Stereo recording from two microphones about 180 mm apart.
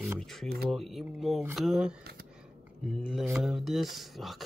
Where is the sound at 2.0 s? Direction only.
60° right (ahead or behind).